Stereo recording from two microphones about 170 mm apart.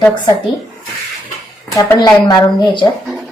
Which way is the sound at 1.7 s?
20° left (ahead or behind).